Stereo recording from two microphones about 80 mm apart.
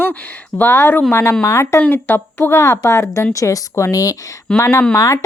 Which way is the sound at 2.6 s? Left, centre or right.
Left.